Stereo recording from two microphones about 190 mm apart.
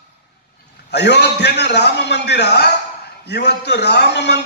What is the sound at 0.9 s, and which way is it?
A man's voice, 60° left (ahead or behind).